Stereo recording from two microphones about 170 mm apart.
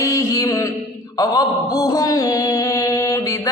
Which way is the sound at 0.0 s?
20° left (ahead or behind).